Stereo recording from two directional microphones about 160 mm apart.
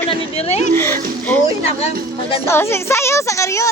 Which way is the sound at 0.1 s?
40° left (ahead or behind).